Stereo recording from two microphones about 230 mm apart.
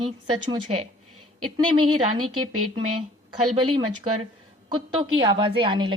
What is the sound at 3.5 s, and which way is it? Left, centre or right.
A woman's voice, right.